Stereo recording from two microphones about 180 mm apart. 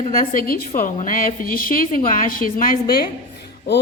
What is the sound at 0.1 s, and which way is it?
A woman's voice, 50° left (ahead or behind).